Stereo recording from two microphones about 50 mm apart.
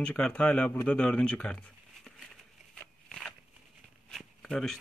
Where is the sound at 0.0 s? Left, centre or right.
Left.